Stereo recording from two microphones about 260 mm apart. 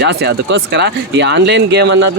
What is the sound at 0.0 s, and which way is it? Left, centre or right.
Speech, right.